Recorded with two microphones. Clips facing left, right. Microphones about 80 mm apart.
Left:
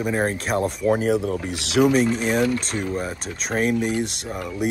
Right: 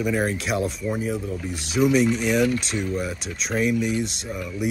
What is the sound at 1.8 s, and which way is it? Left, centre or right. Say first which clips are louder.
Speech: left 1 dB; left.